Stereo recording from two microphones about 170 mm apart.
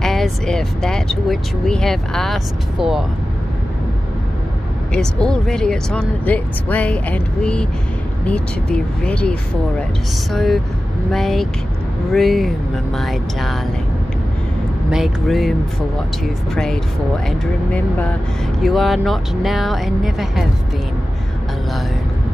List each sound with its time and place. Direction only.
0.0 s speech: centre (ahead or behind)
4.9 s speech: 5° left (ahead or behind)
14.9 s speech: centre (ahead or behind)
16.5 s speech: 5° left (ahead or behind)
18.6 s speech: centre (ahead or behind)